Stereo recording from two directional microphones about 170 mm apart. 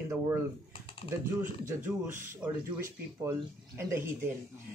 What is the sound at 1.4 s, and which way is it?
Speech, 15° right (ahead or behind).